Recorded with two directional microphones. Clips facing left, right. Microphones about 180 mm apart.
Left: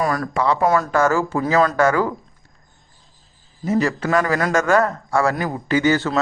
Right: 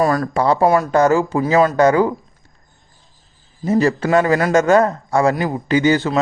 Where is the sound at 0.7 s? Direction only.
20° right (ahead or behind).